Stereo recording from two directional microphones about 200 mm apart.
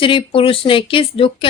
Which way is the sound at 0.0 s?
25° left (ahead or behind).